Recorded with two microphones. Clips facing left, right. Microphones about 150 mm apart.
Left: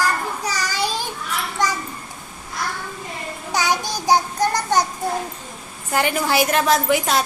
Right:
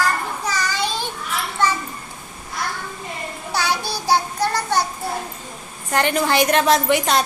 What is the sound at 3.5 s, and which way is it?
Child singing, 15° left (ahead or behind).